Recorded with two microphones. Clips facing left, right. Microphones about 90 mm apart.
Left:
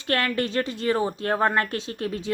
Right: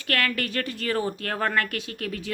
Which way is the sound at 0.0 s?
25° left (ahead or behind).